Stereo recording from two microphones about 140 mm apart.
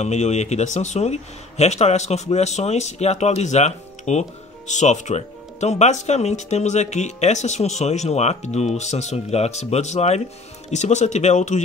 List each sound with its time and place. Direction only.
0.0 s speech: 55° left (ahead or behind)